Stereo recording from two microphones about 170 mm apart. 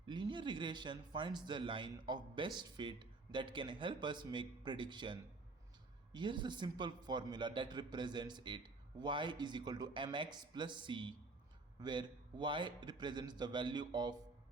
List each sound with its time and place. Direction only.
0.0 s a man's voice: 30° right (ahead or behind)
6.1 s a man's voice: 25° right (ahead or behind)